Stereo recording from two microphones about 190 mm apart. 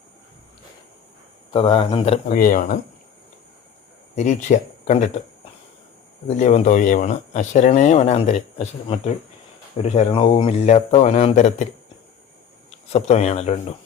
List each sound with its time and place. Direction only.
1.5 s speech: 30° left (ahead or behind)
2.4 s speech: 45° left (ahead or behind)
4.1 s speech: 40° left (ahead or behind)
6.2 s speech: 35° left (ahead or behind)
12.9 s speech: 35° left (ahead or behind)